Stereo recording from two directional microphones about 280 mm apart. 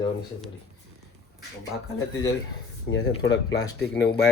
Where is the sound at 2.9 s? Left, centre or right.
Left.